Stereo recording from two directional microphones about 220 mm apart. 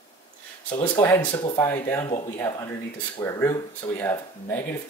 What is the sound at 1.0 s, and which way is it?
Speech, 10° left (ahead or behind).